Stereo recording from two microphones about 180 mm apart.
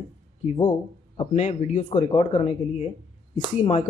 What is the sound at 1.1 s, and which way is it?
Speech, 35° left (ahead or behind).